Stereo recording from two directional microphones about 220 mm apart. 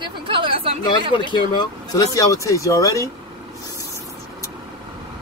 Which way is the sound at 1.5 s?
20° left (ahead or behind).